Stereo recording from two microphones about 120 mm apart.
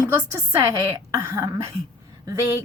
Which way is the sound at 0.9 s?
25° right (ahead or behind).